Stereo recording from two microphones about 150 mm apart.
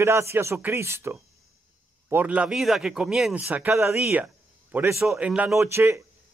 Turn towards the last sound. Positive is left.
turn(degrees=-15)  # may be behind; listen again after turning